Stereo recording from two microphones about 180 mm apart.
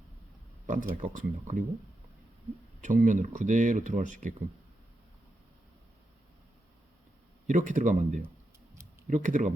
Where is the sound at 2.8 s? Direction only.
45° right (ahead or behind).